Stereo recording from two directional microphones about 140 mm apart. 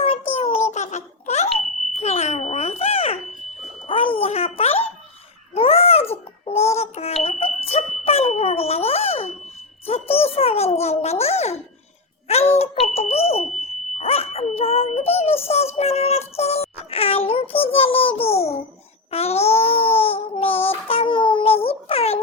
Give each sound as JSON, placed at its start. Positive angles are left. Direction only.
{"t": 0.0, "sound": "a sound", "side_deg": 45}
{"t": 2.0, "sound": "smoke detector", "side_deg": 50}
{"t": 3.6, "sound": "a sound", "side_deg": 40}
{"t": 5.5, "sound": "babbling", "side_deg": 45}
{"t": 6.4, "sound": "child singing", "side_deg": 45}
{"t": 6.7, "sound": "smoke detector", "side_deg": 50}
{"t": 9.8, "sound": "a sound", "side_deg": 45}
{"t": 12.5, "sound": "smoke detector", "side_deg": 45}
{"t": 14.0, "sound": "dog", "side_deg": 45}
{"t": 19.1, "sound": "child singing", "side_deg": 50}